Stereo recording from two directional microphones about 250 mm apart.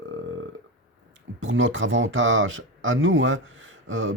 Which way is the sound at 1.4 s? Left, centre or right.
Right.